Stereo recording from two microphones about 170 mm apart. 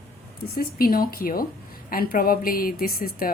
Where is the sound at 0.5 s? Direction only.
60° left (ahead or behind).